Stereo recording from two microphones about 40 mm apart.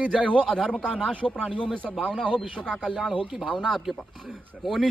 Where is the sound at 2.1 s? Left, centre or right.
Centre.